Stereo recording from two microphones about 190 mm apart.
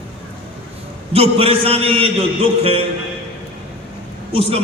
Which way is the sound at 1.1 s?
30° right (ahead or behind).